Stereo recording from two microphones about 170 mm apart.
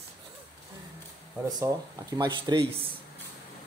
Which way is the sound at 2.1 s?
25° right (ahead or behind).